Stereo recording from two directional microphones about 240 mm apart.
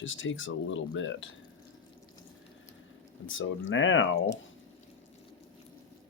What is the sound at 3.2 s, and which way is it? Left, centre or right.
Speech, left.